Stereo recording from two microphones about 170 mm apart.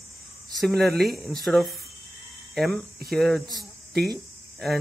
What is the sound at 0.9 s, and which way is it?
Speech, 65° right (ahead or behind).